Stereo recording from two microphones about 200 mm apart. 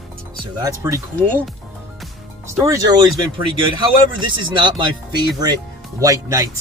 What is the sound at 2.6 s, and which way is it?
A man's voice, 20° right (ahead or behind).